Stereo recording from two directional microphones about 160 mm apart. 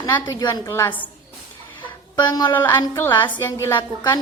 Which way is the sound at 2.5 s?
15° left (ahead or behind).